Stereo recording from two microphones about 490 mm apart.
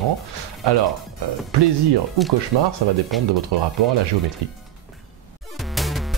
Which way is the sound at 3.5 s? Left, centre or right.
Right.